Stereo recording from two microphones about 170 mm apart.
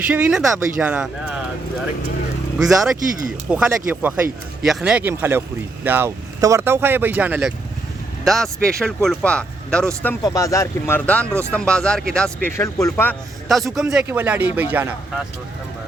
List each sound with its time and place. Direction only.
0.1 s speech: 5° right (ahead or behind)
2.6 s speech: centre (ahead or behind)
8.2 s speech: centre (ahead or behind)
10.2 s speech: 20° left (ahead or behind)
12.5 s speech: 15° left (ahead or behind)
13.5 s speech: centre (ahead or behind)